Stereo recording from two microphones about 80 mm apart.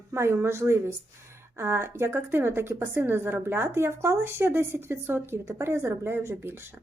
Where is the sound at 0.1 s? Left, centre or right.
Right.